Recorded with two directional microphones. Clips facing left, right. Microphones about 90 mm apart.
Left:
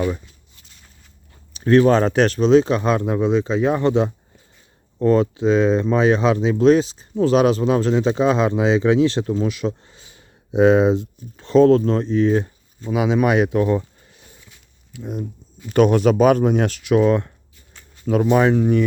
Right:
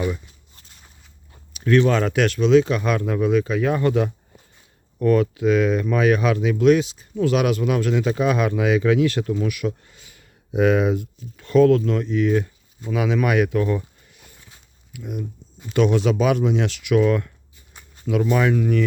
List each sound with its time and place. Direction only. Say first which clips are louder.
1.5 s speech: left 4 dB; 35° left (ahead or behind)
15.7 s speech: left 4 dB; 50° left (ahead or behind); by 17.3 s 30° left (ahead or behind)
18.0 s speech: left 4 dB; 40° left (ahead or behind)